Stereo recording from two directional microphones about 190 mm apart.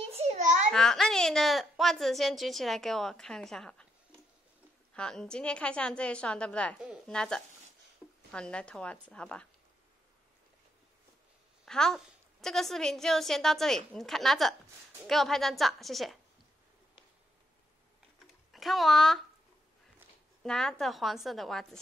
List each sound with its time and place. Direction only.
0.1 s a sound: 35° right (ahead or behind)
0.7 s speech: centre (ahead or behind)
4.9 s a woman's voice: 5° left (ahead or behind)
11.6 s a woman's voice: 5° left (ahead or behind)
18.2 s a sound: centre (ahead or behind)
20.4 s a woman's voice: 5° left (ahead or behind)